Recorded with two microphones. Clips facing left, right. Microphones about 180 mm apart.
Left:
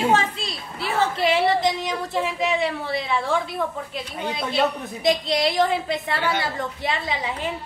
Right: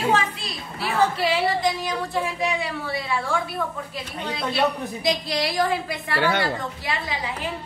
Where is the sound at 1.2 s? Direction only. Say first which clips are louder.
Left 2 dB; 25° left (ahead or behind).